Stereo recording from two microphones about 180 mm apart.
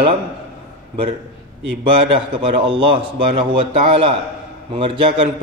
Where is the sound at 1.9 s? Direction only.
30° right (ahead or behind).